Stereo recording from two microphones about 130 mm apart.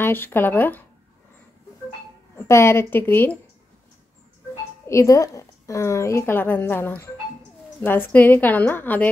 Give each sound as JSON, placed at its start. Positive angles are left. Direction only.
{"t": 0.0, "sound": "a woman's voice", "side_deg": 15}
{"t": 2.3, "sound": "a woman's voice", "side_deg": 20}
{"t": 4.8, "sound": "a woman's voice", "side_deg": 25}